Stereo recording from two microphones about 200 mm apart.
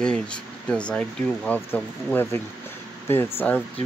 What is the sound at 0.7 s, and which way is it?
Speech, 5° left (ahead or behind).